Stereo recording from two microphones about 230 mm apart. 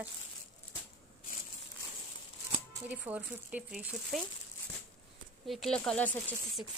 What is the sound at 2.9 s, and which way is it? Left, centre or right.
Speech, centre.